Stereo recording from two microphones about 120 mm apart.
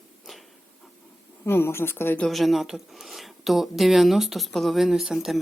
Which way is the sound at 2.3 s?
Centre (ahead or behind).